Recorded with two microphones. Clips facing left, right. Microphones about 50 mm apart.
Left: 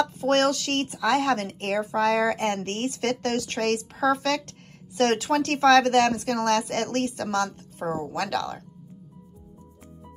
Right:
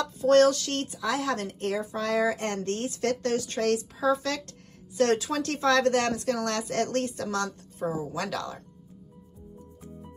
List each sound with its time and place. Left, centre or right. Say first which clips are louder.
0.2 s speech: right 5 dB; left
0.9 s a woman's voice: left 7 dB; left
1.2 s a woman's voice: left 4 dB; left
2.3 s a woman's voice: left 3 dB; left